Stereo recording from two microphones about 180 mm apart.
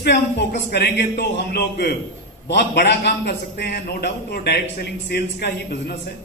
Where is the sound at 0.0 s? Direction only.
70° left (ahead or behind).